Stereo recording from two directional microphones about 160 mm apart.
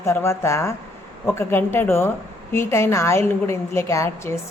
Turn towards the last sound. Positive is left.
turn(degrees=15)  # may be behind; listen again after turning